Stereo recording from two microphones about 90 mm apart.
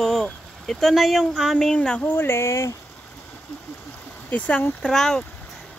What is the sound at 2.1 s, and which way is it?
Speech, 25° left (ahead or behind).